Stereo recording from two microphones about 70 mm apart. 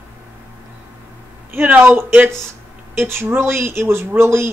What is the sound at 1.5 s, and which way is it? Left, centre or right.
A woman's voice, right.